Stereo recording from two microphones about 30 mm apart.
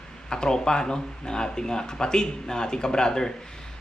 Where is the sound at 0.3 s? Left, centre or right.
Left.